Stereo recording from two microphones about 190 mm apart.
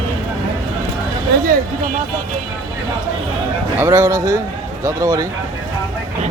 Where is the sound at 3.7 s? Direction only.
15° right (ahead or behind).